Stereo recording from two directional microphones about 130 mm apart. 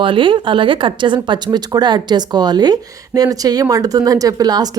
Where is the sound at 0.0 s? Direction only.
40° right (ahead or behind).